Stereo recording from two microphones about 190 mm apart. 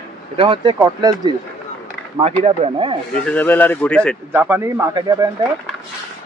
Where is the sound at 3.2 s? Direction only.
10° left (ahead or behind).